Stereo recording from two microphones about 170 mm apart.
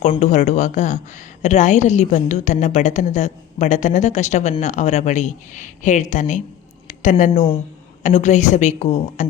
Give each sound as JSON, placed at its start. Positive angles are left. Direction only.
{"t": 0.2, "sound": "a woman's voice", "side_deg": 45}
{"t": 6.8, "sound": "a sound", "side_deg": 50}
{"t": 8.0, "sound": "a woman's voice", "side_deg": 45}